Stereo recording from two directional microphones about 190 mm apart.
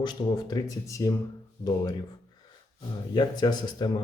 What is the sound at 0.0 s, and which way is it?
Speech, 20° left (ahead or behind).